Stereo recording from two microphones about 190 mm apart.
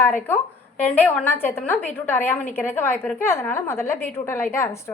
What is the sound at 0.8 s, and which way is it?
A woman's voice, 10° left (ahead or behind).